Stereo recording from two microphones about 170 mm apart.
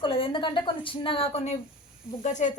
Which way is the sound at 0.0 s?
30° left (ahead or behind).